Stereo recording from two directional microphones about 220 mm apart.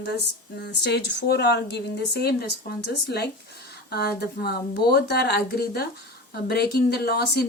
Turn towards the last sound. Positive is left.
turn(degrees=45)  # may be behind; listen again after turning